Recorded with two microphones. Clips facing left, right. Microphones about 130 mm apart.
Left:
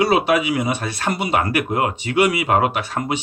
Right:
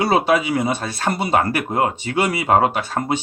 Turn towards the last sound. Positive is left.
turn(degrees=-30)  # may be behind; listen again after turning